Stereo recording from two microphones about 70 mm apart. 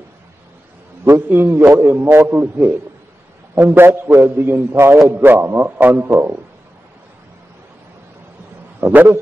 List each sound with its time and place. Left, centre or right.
1.0 s a man's voice: right
8.8 s a man's voice: right